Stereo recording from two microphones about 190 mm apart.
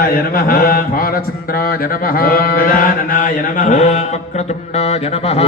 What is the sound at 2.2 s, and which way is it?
Mantra, 50° left (ahead or behind).